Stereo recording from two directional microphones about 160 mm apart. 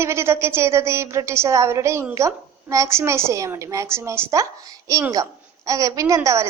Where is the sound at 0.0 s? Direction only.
15° right (ahead or behind).